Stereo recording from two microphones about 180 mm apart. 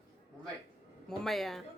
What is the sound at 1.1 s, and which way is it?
Speech, centre (ahead or behind).